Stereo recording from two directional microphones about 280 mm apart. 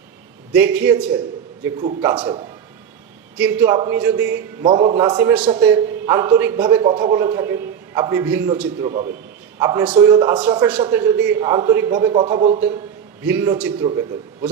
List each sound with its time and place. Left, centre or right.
0.5 s a man's voice: centre
4.6 s a man's voice: centre
13.2 s a man's voice: centre